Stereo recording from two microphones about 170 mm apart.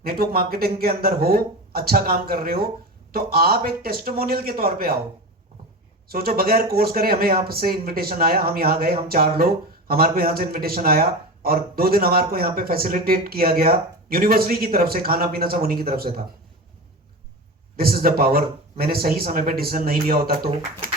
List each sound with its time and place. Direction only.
0.0 s speech: 65° right (ahead or behind)
6.1 s speech: 60° right (ahead or behind)
17.7 s speech: 60° right (ahead or behind)